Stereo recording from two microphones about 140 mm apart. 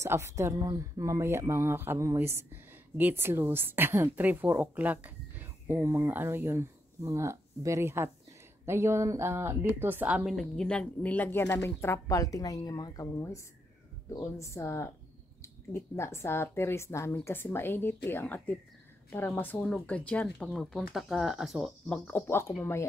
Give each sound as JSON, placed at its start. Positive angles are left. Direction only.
{"t": 0.0, "sound": "a woman's voice", "side_deg": -20}
{"t": 22.0, "sound": "a woman's voice", "side_deg": 15}